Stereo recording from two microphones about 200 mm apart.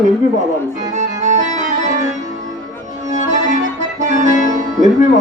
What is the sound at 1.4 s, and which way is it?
Music, 40° right (ahead or behind).